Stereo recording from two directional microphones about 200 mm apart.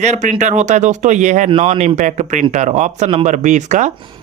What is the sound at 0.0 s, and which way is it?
Speech, 35° right (ahead or behind).